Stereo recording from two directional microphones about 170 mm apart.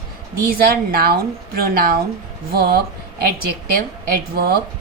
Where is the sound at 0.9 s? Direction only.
65° right (ahead or behind).